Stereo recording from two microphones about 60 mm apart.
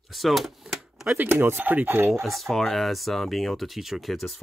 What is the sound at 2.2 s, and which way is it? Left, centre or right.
Speech, centre.